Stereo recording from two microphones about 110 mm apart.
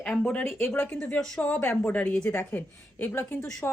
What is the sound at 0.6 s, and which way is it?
A woman's voice, 15° left (ahead or behind).